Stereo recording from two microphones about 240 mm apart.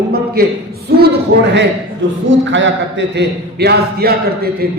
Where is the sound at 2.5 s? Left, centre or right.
Right.